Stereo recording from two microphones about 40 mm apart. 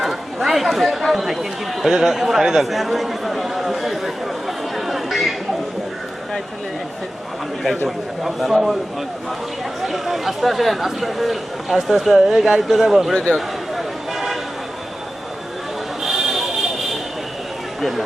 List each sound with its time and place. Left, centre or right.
0.0 s speech: centre
4.9 s chatter: centre
7.9 s speech: centre
9.8 s a man's voice: centre
13.1 s speech: centre
13.7 s vehicle: centre
16.0 s a sound: centre
17.7 s speech: centre